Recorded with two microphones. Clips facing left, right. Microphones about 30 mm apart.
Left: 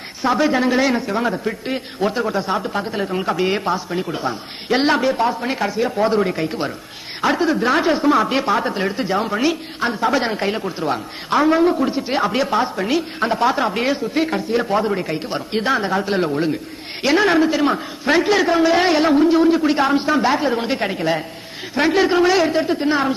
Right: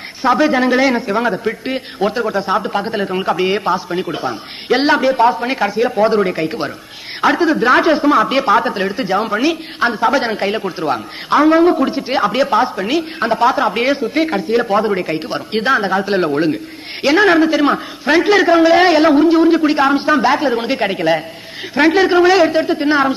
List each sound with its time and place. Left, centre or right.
0.3 s a man's voice: centre
3.4 s a man's voice: centre
3.7 s a man's voice: right
11.7 s a man's voice: right; by 13.7 s centre
13.7 s a man's voice: right